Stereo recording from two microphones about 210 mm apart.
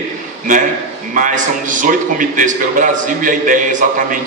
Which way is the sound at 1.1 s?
40° right (ahead or behind).